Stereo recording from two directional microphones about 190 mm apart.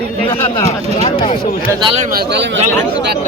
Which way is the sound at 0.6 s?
30° left (ahead or behind).